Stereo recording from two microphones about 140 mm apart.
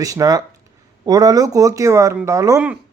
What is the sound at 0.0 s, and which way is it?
A man's voice, 25° right (ahead or behind).